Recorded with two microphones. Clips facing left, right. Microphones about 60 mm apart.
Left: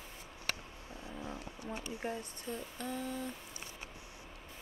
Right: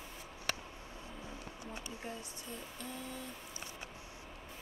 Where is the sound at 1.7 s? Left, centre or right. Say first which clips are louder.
Left 6 dB; left.